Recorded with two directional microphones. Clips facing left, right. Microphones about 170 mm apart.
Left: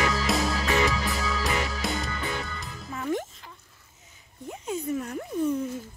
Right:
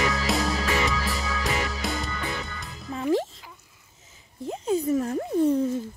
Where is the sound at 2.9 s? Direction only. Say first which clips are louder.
Right 5 dB; 30° right (ahead or behind).